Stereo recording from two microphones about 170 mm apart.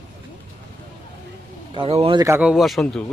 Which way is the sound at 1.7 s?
35° right (ahead or behind).